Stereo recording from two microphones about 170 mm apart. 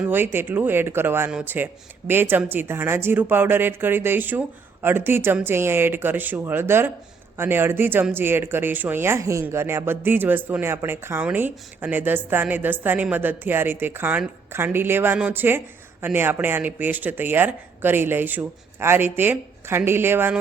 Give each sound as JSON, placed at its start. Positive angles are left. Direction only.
{"t": 0.0, "sound": "speech", "side_deg": -10}